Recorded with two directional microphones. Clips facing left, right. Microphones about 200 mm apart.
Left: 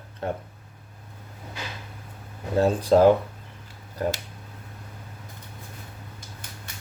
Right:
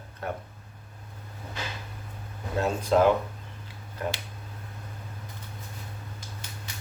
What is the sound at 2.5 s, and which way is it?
Speech, 35° left (ahead or behind).